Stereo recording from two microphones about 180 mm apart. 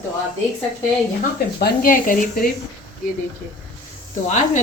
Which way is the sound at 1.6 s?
50° left (ahead or behind).